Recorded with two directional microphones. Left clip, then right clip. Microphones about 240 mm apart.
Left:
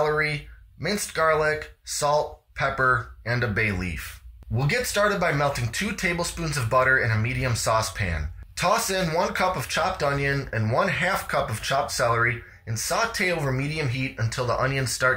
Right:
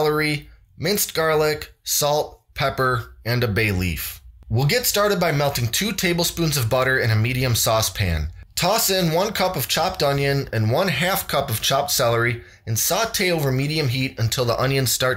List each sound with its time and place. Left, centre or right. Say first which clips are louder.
0.0 s speech: right 3 dB; right